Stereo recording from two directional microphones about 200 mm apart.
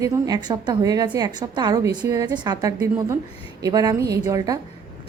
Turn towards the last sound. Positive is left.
turn(degrees=-15)  # may be behind; listen again after turning